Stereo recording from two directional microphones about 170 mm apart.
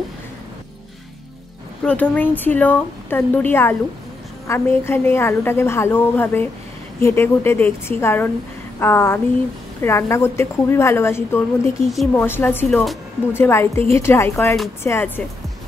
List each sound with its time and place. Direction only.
1.9 s a woman's voice: 10° left (ahead or behind)
11.9 s a woman's voice: centre (ahead or behind)
12.3 s a woman's voice: 15° left (ahead or behind)